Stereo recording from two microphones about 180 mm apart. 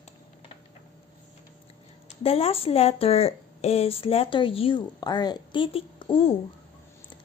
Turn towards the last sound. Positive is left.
turn(degrees=30)  # may be behind; listen again after turning